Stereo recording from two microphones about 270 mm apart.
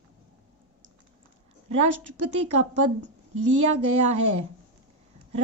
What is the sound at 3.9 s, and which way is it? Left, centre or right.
Speech, right.